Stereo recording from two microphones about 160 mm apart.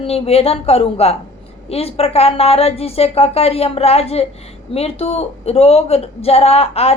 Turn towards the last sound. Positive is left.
turn(degrees=40)  # may be behind; listen again after turning